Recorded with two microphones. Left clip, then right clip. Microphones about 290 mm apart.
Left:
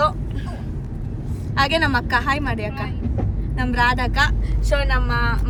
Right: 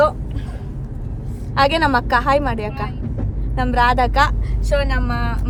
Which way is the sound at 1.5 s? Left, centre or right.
Right.